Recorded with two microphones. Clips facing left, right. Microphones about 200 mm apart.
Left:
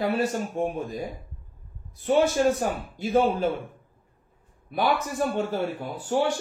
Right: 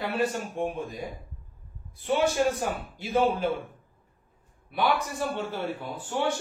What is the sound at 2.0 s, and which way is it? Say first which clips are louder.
A man's voice: left 4 dB; 45° left (ahead or behind).